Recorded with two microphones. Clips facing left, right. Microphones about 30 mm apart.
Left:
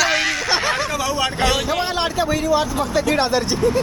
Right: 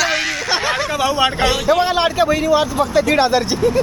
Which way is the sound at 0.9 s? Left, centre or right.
Right.